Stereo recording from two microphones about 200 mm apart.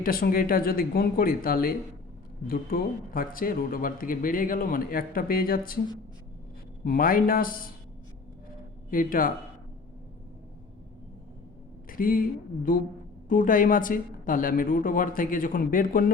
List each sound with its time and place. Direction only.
0.0 s speech: 45° left (ahead or behind)
6.8 s speech: 45° left (ahead or behind)
8.9 s speech: 45° left (ahead or behind)
11.9 s speech: 45° left (ahead or behind)
13.2 s speech: 40° left (ahead or behind)